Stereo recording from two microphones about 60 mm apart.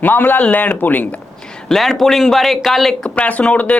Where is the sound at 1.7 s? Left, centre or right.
Centre.